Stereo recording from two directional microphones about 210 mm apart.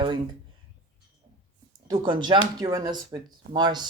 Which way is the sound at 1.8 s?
25° right (ahead or behind).